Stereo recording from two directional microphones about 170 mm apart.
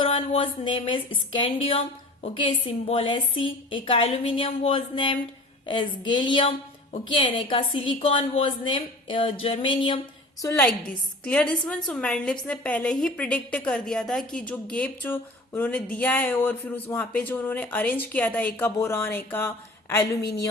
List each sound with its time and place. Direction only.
0.0 s a woman's voice: 35° left (ahead or behind)
10.4 s a woman's voice: 15° left (ahead or behind)